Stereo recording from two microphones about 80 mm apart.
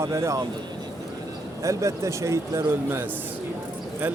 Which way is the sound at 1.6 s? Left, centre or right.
Right.